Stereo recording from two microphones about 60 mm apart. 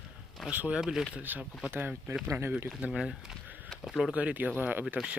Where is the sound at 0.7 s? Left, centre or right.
Centre.